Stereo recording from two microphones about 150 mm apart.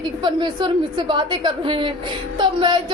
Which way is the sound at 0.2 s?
30° right (ahead or behind).